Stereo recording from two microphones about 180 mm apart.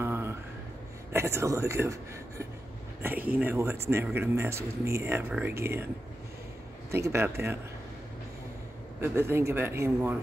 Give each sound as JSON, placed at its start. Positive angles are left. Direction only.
{"t": 0.0, "sound": "a sound", "side_deg": -15}
{"t": 1.1, "sound": "speech", "side_deg": -15}
{"t": 6.9, "sound": "speech", "side_deg": -15}
{"t": 9.0, "sound": "speech", "side_deg": -15}